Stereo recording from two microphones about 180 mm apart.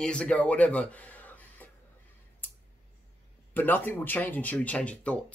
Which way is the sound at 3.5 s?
10° left (ahead or behind).